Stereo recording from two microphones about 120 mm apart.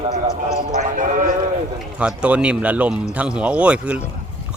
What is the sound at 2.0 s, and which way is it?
Speech, 10° right (ahead or behind).